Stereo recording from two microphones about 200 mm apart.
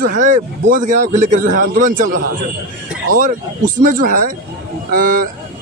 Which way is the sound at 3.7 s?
40° right (ahead or behind).